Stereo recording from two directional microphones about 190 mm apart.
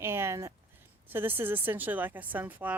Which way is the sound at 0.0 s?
15° right (ahead or behind).